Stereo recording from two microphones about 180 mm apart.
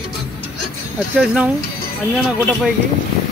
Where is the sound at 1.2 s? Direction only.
5° right (ahead or behind).